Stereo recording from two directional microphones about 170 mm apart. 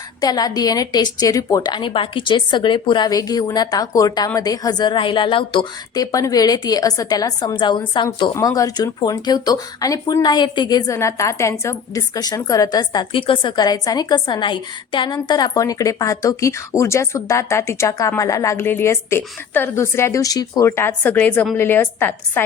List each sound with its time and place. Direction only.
0.2 s a woman's voice: 25° left (ahead or behind)